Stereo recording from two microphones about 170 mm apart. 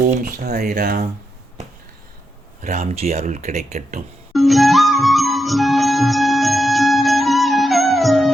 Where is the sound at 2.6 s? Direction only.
40° right (ahead or behind).